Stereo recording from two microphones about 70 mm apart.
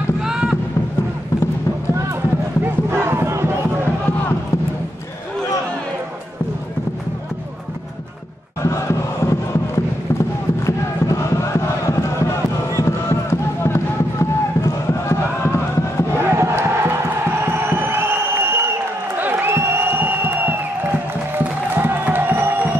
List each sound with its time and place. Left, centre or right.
0.2 s a sound: centre
2.6 s crowd: right
8.6 s crowd: left
10.1 s chant: left
14.6 s crowd: left
16.3 s crowd: right
17.5 s a sound: right
21.4 s music: right